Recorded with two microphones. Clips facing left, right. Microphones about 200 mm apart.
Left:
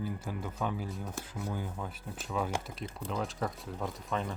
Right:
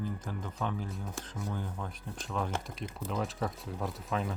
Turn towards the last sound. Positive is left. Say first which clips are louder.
# right 1 dB
turn(degrees=-5)  # may be behind; listen again after turning